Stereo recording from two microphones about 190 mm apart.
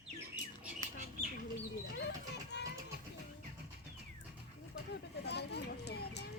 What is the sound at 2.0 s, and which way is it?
Children playing, 60° left (ahead or behind).